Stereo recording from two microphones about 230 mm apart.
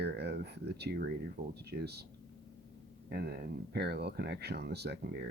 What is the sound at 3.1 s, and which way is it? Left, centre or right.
Speech, right.